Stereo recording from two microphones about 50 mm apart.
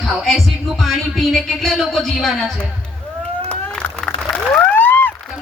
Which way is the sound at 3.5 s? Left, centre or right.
Left.